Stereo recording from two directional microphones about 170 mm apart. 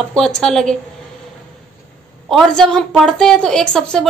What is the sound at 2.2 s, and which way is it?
A woman's voice, centre (ahead or behind).